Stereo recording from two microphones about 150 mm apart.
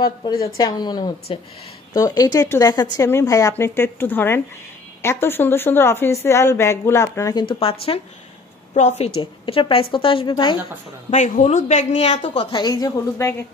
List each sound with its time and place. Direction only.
0.0 s a woman's voice: 30° left (ahead or behind); by 12.3 s 50° left (ahead or behind)
12.4 s a woman's voice: 30° left (ahead or behind)